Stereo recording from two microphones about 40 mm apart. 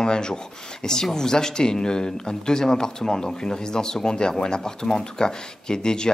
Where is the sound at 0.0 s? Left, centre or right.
Centre.